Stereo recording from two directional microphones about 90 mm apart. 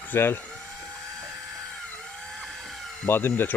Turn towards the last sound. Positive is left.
turn(degrees=20)  # may be behind; listen again after turning